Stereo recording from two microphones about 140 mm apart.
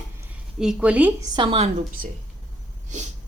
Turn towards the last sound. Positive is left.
turn(degrees=-55)  # may be behind; listen again after turning